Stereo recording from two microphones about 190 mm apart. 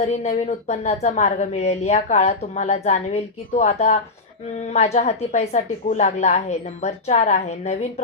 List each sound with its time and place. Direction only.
0.0 s speech: 35° left (ahead or behind)